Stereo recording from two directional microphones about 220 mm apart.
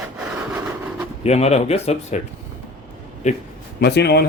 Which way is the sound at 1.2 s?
30° left (ahead or behind).